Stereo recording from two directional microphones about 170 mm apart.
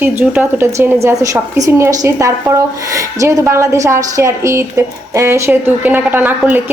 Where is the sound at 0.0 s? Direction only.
10° right (ahead or behind).